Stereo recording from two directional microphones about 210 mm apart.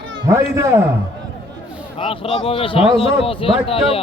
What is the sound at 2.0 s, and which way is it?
Speech, 25° left (ahead or behind).